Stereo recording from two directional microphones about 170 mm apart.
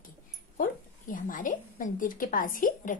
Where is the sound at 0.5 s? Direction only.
55° left (ahead or behind).